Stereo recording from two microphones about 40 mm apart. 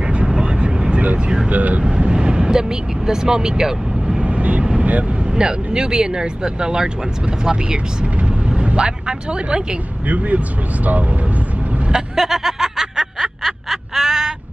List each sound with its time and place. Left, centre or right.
0.0 s vehicle: right
1.5 s vehicle: right
1.8 s speech: right
4.2 s vehicle: right
5.3 s speech: centre
10.0 s speech: right
11.9 s a sound: centre